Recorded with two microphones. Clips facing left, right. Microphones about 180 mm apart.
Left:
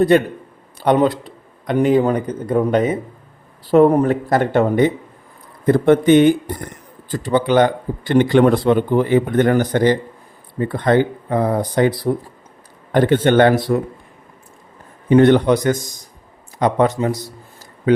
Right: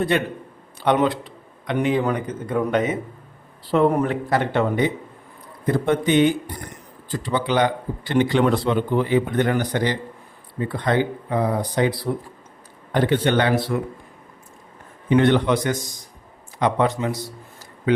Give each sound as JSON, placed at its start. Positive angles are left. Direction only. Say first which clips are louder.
{"t": 0.1, "sound": "a man's voice", "louder": "left 8 dB", "side_deg": 40}
{"t": 13.7, "sound": "speech", "louder": "left 6 dB", "side_deg": 40}
{"t": 15.1, "sound": "a man's voice", "louder": "left 6 dB", "side_deg": 40}